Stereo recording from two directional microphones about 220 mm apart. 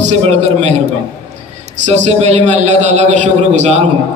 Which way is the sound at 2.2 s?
30° right (ahead or behind).